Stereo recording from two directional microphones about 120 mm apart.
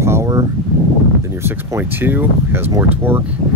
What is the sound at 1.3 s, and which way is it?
Speech, 20° right (ahead or behind).